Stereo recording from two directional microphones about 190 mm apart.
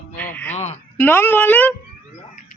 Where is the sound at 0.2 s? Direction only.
10° left (ahead or behind).